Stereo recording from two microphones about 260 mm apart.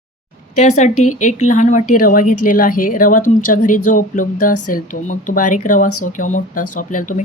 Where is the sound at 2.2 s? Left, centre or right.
Left.